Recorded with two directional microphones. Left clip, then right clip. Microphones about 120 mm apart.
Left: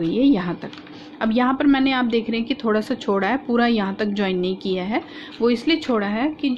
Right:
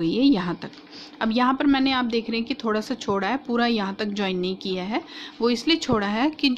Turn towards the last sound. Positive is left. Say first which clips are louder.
# left 1 dB
turn(degrees=-30)  # may be behind; listen again after turning